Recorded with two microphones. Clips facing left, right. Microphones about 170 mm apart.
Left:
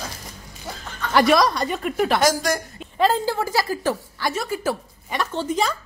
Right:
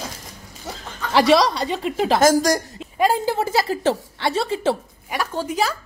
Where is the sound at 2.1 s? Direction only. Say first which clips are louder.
Right 4 dB; 45° right (ahead or behind).